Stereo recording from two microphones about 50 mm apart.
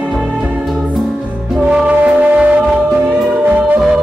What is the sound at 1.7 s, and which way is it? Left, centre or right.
Music, right.